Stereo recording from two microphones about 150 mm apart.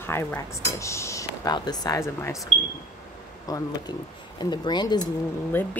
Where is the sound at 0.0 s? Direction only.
15° left (ahead or behind).